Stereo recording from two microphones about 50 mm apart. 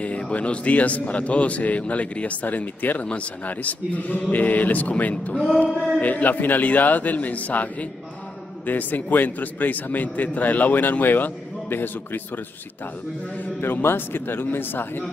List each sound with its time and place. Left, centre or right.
0.0 s a man's voice: left
13.6 s a man's voice: left